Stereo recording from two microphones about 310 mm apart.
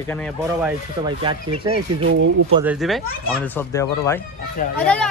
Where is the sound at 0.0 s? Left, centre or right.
Centre.